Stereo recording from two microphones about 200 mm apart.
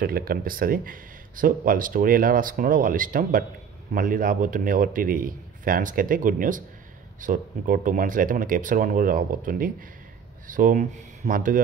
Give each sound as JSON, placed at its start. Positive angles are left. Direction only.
{"t": 0.0, "sound": "speech", "side_deg": -50}